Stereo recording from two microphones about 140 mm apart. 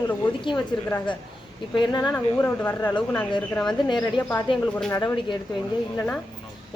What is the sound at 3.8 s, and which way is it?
A woman's voice, 35° left (ahead or behind).